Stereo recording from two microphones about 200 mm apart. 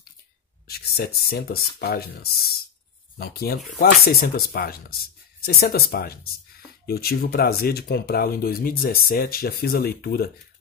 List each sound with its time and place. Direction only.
0.7 s speech: 50° left (ahead or behind)
3.2 s speech: 50° left (ahead or behind)